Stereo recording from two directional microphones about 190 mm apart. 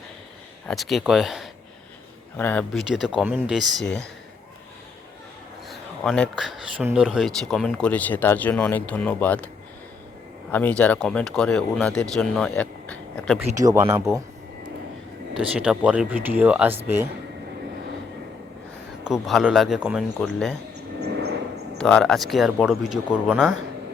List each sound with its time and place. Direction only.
0.7 s speech: centre (ahead or behind)
2.9 s speech: 5° right (ahead or behind)
5.6 s a sound: 5° left (ahead or behind)
6.8 s speech: 5° right (ahead or behind)
10.5 s speech: 10° left (ahead or behind)
15.3 s speech: 5° right (ahead or behind)
19.0 s speech: centre (ahead or behind)
20.7 s a sound: 60° right (ahead or behind)
21.8 s speech: 5° left (ahead or behind)